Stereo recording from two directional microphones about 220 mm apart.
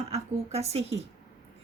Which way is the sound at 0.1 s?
30° right (ahead or behind).